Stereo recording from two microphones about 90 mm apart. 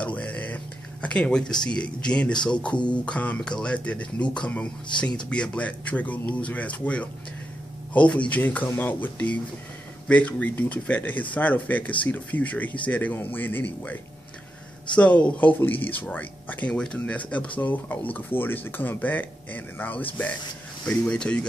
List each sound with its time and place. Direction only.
0.0 s a sound: 15° left (ahead or behind)
1.0 s speech: 10° left (ahead or behind)
15.0 s speech: 15° left (ahead or behind)